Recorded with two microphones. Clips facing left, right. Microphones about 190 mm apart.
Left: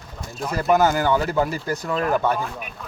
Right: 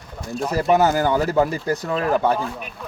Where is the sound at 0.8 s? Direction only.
35° right (ahead or behind).